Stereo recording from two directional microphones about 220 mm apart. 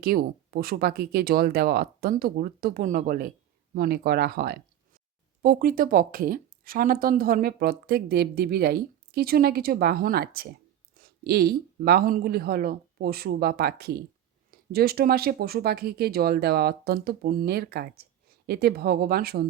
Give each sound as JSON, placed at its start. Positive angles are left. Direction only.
{"t": 0.0, "sound": "speech", "side_deg": -45}